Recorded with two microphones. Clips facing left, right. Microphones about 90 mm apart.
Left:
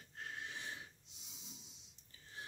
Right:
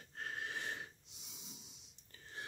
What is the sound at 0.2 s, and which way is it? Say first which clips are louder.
Wheeze: right 4 dB; 50° right (ahead or behind).